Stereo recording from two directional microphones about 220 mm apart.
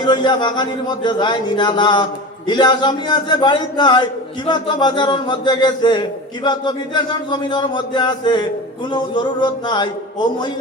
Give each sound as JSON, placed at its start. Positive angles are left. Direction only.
{"t": 0.0, "sound": "a man's voice", "side_deg": 20}